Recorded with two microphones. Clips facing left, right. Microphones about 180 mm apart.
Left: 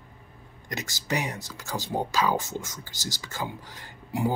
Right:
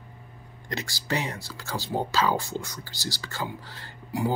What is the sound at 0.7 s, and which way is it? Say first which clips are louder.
Speech: right 1 dB; 20° left (ahead or behind).